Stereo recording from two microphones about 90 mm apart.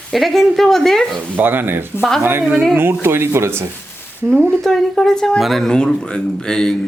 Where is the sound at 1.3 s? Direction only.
20° right (ahead or behind).